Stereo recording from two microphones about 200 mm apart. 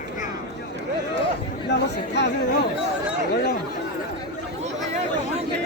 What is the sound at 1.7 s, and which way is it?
Chatter, 60° left (ahead or behind).